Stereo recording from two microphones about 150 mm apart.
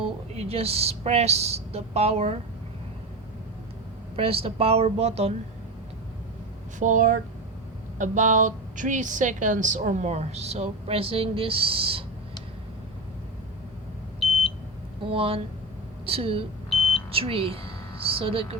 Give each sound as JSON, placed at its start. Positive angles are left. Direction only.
{"t": 0.0, "sound": "a woman's voice", "side_deg": -40}
{"t": 4.1, "sound": "speech", "side_deg": -40}
{"t": 6.7, "sound": "a woman's voice", "side_deg": -60}
{"t": 15.1, "sound": "speech", "side_deg": -35}